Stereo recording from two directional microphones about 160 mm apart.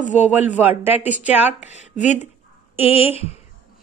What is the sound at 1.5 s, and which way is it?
Speech, 45° left (ahead or behind).